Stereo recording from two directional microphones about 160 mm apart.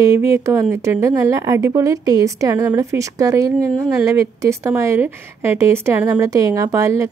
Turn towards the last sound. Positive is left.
turn(degrees=-20)  # may be behind; listen again after turning